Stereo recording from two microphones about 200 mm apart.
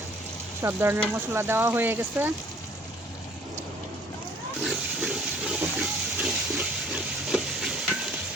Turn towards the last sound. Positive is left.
turn(degrees=-5)  # may be behind; listen again after turning